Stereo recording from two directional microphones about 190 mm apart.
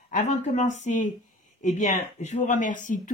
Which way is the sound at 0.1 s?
40° left (ahead or behind).